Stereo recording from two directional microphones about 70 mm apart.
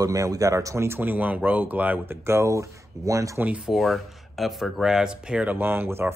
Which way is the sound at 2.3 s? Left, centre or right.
Right.